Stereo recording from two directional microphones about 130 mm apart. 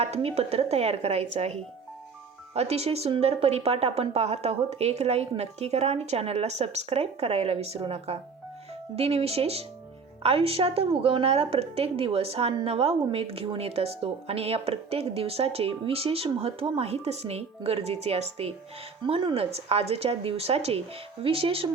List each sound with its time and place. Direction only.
0.0 s a woman's voice: 50° right (ahead or behind)